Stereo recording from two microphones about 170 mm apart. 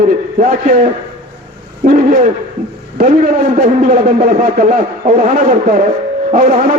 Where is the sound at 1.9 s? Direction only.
50° right (ahead or behind).